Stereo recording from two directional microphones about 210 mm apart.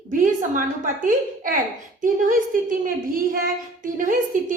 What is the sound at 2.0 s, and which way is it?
A woman's voice, 40° right (ahead or behind).